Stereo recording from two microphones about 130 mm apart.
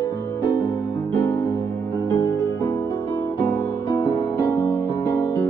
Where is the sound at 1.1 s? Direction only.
15° left (ahead or behind).